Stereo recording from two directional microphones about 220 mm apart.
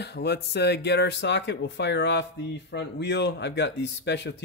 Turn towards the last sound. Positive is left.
turn(degrees=50)  # may be behind; listen again after turning